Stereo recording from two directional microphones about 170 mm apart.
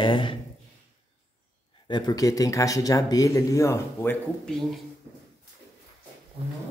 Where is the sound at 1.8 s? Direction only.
25° left (ahead or behind).